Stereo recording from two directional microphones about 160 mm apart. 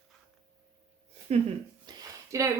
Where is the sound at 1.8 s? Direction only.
20° right (ahead or behind).